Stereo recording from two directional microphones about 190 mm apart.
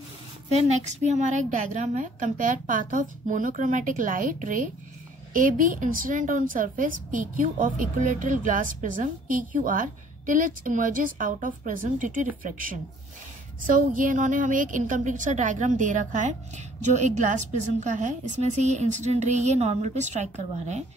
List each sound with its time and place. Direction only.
0.5 s a woman's voice: 35° right (ahead or behind)